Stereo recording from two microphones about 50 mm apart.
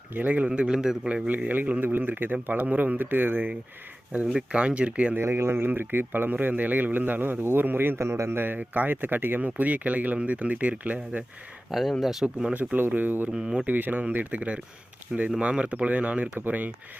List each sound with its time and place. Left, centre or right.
0.1 s speech: right
0.3 s a man's voice: right
1.0 s speech: right
4.3 s speech: centre
5.1 s speech: right
7.9 s a man's voice: right
8.4 s speech: right
11.7 s speech: centre
12.2 s a man's voice: centre
12.5 s speech: right
13.3 s a man's voice: centre
13.7 s speech: right